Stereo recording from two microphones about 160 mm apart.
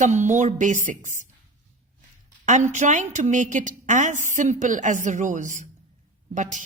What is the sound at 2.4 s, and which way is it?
A man's voice, 50° right (ahead or behind).